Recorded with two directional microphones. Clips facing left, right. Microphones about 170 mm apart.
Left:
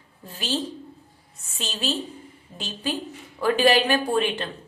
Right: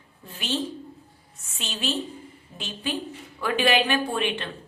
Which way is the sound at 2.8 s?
35° left (ahead or behind).